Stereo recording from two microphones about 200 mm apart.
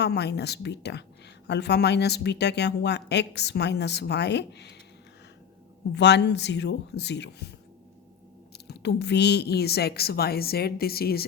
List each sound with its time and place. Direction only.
0.0 s speech: 55° left (ahead or behind)
6.0 s speech: 60° left (ahead or behind)
8.5 s a woman's voice: 55° left (ahead or behind)